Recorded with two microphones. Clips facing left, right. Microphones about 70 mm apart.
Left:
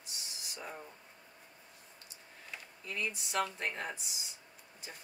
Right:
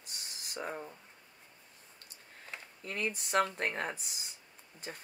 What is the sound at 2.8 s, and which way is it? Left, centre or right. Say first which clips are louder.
Speech: right 2 dB; right.